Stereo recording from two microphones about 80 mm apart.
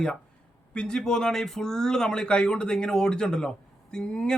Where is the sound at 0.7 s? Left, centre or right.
Centre.